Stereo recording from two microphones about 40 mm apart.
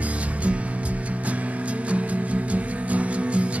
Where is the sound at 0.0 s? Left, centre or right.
Right.